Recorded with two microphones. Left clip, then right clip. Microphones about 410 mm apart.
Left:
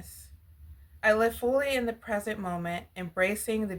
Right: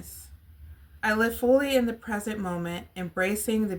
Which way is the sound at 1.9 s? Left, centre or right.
Centre.